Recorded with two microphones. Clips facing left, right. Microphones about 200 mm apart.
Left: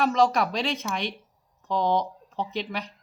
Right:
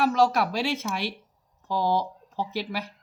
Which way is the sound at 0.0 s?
5° right (ahead or behind).